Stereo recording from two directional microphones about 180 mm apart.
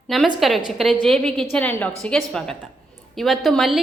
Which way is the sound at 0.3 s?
Centre (ahead or behind).